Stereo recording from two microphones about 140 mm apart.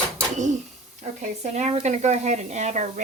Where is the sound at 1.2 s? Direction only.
55° right (ahead or behind).